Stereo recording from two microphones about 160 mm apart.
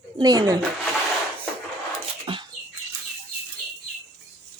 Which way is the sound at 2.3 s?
35° right (ahead or behind).